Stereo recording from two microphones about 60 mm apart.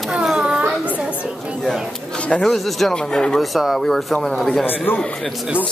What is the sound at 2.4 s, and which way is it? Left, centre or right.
Speech, centre.